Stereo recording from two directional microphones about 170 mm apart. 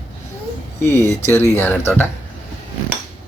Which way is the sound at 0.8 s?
15° left (ahead or behind).